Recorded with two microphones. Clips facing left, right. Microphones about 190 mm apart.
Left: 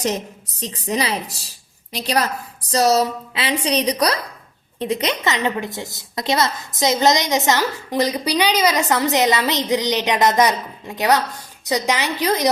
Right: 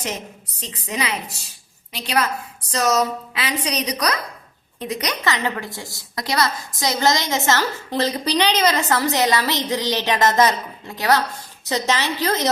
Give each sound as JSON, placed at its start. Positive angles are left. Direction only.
{"t": 0.6, "sound": "a woman's voice", "side_deg": 40}